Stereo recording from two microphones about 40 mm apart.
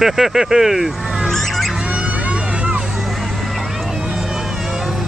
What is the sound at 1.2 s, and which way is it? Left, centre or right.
Fowl, centre.